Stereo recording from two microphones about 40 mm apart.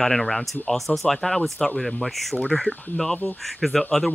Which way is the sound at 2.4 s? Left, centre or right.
Centre.